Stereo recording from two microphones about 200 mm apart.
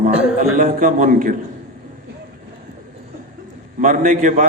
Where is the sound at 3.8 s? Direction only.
40° right (ahead or behind).